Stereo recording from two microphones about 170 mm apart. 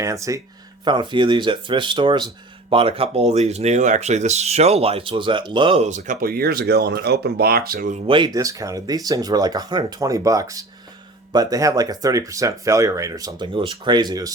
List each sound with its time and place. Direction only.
0.0 s speech: 20° right (ahead or behind); by 8.0 s 50° right (ahead or behind)
8.0 s speech: 30° right (ahead or behind)